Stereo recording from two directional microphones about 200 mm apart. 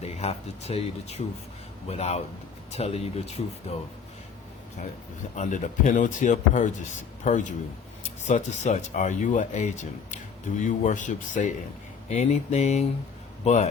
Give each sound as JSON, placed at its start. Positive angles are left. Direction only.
{"t": 0.0, "sound": "speech", "side_deg": 30}
{"t": 5.4, "sound": "speech", "side_deg": 40}